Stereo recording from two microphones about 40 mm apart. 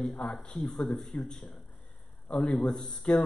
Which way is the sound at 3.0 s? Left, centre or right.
Left.